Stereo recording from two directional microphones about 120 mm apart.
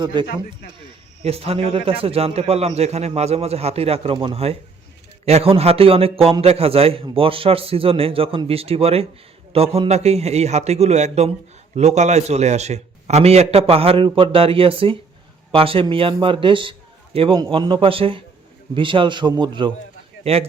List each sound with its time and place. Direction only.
0.0 s speech: 40° right (ahead or behind)
1.2 s a man's voice: 55° right (ahead or behind)
20.2 s a man's voice: 55° right (ahead or behind)